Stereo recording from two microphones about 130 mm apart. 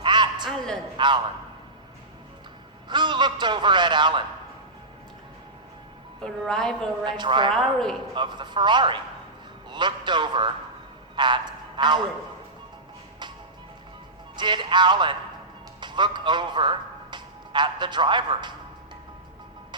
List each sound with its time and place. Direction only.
0.0 s a sound: 35° right (ahead or behind)
0.9 s a man's voice: 35° right (ahead or behind)
2.9 s a man's voice: 35° right (ahead or behind)
6.2 s a woman's voice: 5° left (ahead or behind)
7.0 s a man's voice: 35° right (ahead or behind)
7.5 s a woman's voice: 5° left (ahead or behind)
8.1 s a man's voice: 35° right (ahead or behind)
14.3 s a man's voice: 35° right (ahead or behind)